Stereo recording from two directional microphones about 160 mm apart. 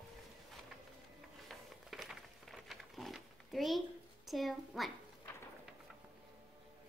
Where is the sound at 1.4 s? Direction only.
Centre (ahead or behind).